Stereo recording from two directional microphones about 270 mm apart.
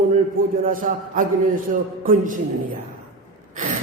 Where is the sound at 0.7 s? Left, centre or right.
Right.